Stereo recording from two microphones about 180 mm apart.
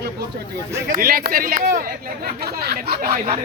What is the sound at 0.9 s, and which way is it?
Speech, 55° right (ahead or behind).